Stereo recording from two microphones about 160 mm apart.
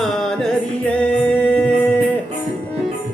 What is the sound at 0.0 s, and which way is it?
Music, 5° left (ahead or behind).